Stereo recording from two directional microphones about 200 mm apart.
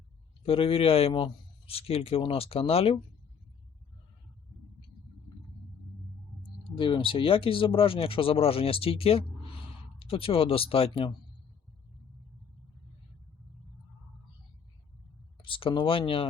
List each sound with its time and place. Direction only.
0.4 s a man's voice: 30° left (ahead or behind)
6.7 s a man's voice: 25° left (ahead or behind)
15.4 s speech: 25° left (ahead or behind)